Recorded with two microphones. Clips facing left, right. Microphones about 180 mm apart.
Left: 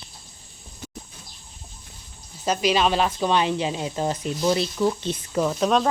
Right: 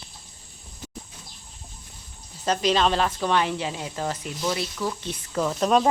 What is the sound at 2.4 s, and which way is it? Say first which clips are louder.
Speech: left 1 dB; 10° left (ahead or behind).